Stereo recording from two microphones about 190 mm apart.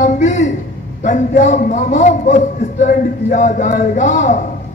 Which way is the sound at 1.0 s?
40° left (ahead or behind).